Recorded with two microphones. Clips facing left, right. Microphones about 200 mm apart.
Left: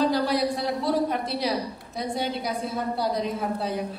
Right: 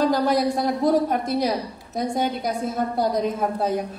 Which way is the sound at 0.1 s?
50° right (ahead or behind).